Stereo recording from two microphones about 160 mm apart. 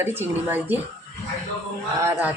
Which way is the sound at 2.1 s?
10° right (ahead or behind).